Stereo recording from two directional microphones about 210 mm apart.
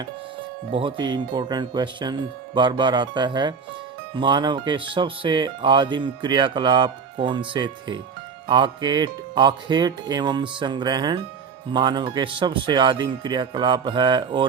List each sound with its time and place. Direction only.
0.7 s speech: 25° right (ahead or behind)